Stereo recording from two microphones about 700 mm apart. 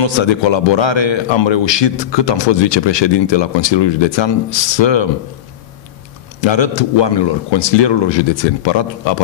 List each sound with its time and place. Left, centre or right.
0.0 s a man's voice: left
6.4 s a man's voice: left